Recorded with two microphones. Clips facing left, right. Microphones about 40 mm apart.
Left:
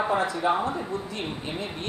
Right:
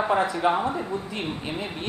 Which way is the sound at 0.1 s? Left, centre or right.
Right.